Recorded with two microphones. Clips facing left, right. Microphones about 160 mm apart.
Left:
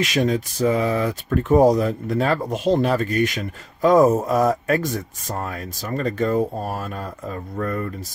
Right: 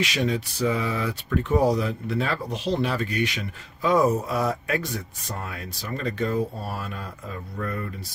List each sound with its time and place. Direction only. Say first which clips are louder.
0.0 s speech: left 5 dB; 45° left (ahead or behind)